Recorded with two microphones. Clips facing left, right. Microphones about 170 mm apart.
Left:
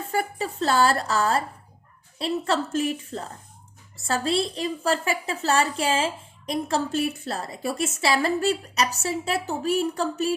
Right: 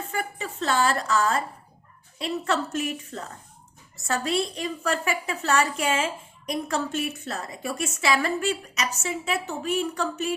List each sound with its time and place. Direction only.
0.1 s a woman's voice: 35° left (ahead or behind)